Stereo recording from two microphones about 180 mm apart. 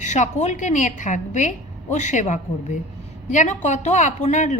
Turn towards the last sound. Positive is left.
turn(degrees=40)  # may be behind; listen again after turning